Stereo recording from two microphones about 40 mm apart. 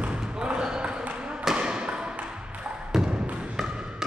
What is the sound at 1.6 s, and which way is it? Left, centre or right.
Thump, right.